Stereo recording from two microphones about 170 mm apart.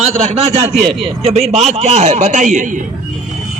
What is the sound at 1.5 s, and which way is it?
A man's voice, 40° right (ahead or behind).